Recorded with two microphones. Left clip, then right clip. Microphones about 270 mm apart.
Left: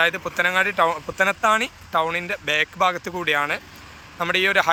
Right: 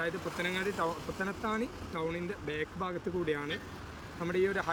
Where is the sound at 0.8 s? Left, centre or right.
Left.